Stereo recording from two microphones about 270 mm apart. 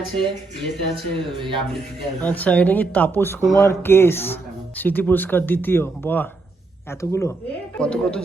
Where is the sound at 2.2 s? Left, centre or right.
Centre.